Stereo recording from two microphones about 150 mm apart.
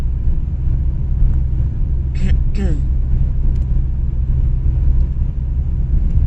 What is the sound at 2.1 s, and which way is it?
Vehicle, centre (ahead or behind).